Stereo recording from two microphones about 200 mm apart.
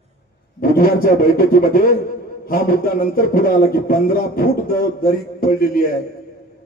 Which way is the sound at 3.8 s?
45° left (ahead or behind).